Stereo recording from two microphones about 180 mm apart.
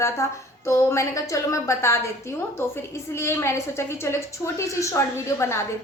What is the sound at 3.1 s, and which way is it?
A woman's voice, 15° left (ahead or behind).